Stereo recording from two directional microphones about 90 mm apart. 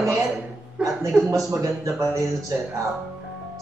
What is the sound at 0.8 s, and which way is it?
Speech, 10° right (ahead or behind).